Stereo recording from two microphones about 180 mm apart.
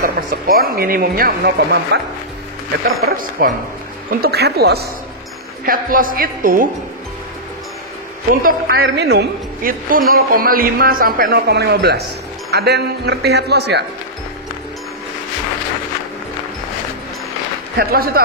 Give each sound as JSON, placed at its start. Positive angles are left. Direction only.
{"t": 0.0, "sound": "a woman's voice", "side_deg": -55}
{"t": 3.1, "sound": "a woman's voice", "side_deg": -55}
{"t": 5.7, "sound": "speech", "side_deg": -50}
{"t": 8.3, "sound": "a woman's voice", "side_deg": -50}
{"t": 17.7, "sound": "a woman's voice", "side_deg": -55}